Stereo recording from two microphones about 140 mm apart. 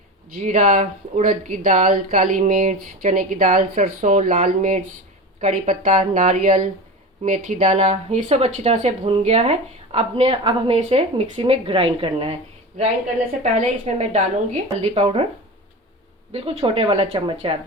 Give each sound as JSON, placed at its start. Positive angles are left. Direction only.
{"t": 0.3, "sound": "a woman's voice", "side_deg": -65}
{"t": 16.3, "sound": "speech", "side_deg": -45}